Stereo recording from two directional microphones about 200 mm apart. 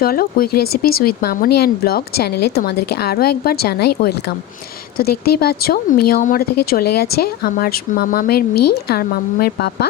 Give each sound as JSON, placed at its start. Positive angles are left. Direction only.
{"t": 0.0, "sound": "speech", "side_deg": 50}